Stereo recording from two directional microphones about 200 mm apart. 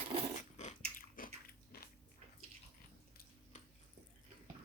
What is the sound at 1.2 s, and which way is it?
Biting, 45° left (ahead or behind).